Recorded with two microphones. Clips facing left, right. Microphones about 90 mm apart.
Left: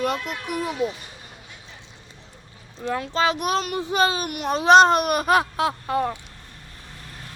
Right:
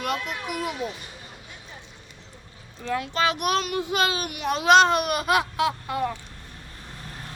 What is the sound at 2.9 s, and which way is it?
Speech, 30° left (ahead or behind).